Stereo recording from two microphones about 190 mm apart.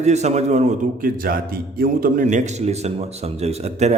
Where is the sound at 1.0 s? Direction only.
50° right (ahead or behind).